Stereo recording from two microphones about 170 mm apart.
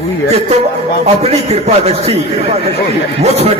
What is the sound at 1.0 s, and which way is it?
A man's voice, 40° right (ahead or behind).